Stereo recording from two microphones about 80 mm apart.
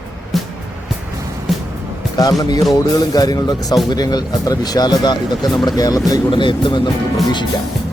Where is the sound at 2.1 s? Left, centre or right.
Left.